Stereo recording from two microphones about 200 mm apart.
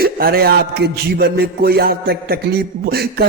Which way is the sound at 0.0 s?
50° right (ahead or behind).